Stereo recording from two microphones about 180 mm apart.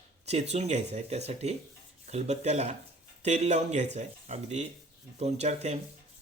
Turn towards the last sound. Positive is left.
turn(degrees=-40)  # may be behind; listen again after turning